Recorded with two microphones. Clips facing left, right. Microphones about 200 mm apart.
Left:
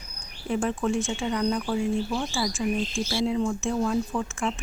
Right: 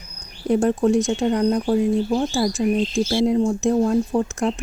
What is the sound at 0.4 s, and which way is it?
Speech, 40° right (ahead or behind).